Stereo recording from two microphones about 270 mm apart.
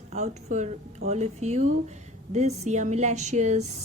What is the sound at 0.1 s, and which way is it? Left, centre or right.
A woman's voice, right.